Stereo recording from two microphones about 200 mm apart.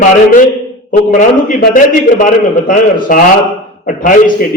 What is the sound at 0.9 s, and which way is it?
A man's voice, 40° left (ahead or behind).